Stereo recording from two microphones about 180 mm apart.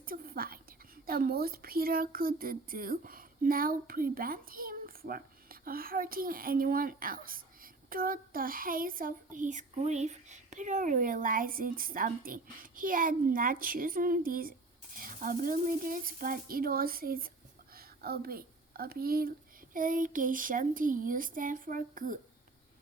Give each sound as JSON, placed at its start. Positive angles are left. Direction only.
{"t": 0.0, "sound": "a woman's voice", "side_deg": -55}